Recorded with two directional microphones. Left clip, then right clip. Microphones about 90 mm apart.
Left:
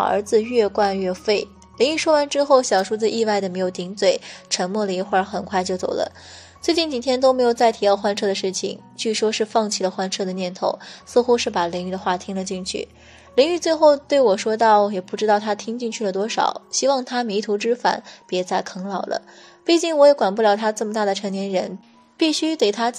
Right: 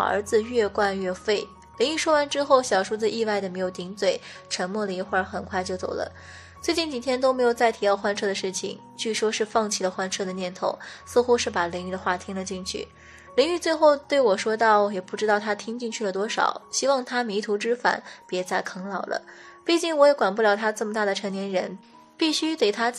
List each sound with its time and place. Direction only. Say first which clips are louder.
0.0 s a woman's voice: left 4 dB; 20° left (ahead or behind)